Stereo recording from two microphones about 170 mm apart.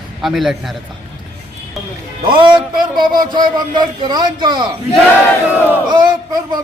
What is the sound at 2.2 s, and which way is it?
A man's voice, 30° right (ahead or behind).